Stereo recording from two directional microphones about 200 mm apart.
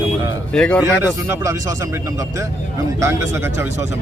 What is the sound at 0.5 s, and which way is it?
Speech, 5° left (ahead or behind).